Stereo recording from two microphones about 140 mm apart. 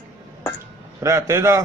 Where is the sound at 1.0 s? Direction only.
20° right (ahead or behind).